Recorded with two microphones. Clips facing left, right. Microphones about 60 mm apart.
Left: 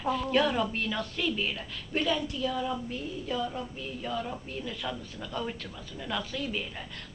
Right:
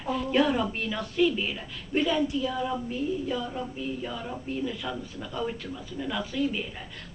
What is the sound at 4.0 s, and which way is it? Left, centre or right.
A woman's voice, centre.